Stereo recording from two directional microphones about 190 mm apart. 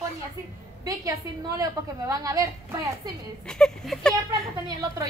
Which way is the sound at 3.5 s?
5° left (ahead or behind).